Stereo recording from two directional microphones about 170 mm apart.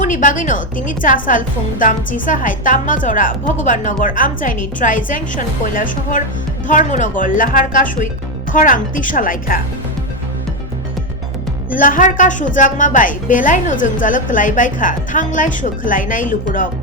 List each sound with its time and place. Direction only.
0.0 s a woman's voice: 50° left (ahead or behind)
11.7 s a woman's voice: 50° left (ahead or behind)